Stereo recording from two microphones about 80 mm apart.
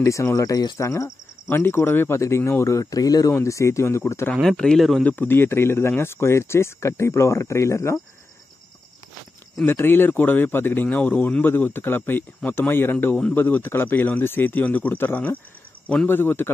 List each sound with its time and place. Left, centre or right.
0.0 s speech: left
4.4 s speech: centre
5.0 s speech: left
9.7 s speech: left